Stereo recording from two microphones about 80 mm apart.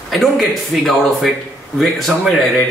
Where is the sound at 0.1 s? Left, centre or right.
Centre.